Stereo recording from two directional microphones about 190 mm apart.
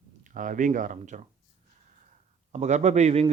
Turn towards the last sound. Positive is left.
turn(degrees=-35)  # may be behind; listen again after turning